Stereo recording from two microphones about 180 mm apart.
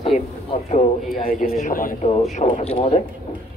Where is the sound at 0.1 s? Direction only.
40° left (ahead or behind).